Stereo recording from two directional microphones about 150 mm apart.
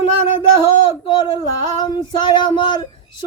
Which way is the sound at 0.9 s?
30° left (ahead or behind).